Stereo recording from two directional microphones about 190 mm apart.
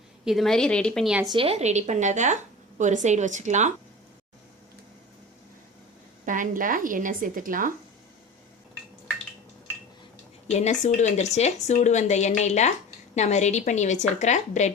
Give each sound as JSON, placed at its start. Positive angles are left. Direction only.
{"t": 0.3, "sound": "a woman's voice", "side_deg": 0}
{"t": 1.2, "sound": "a woman's voice", "side_deg": -25}
{"t": 6.2, "sound": "a woman's voice", "side_deg": -45}
{"t": 10.5, "sound": "a woman's voice", "side_deg": 35}